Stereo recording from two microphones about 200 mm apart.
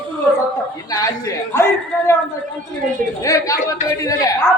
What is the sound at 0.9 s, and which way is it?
Speech, 20° left (ahead or behind).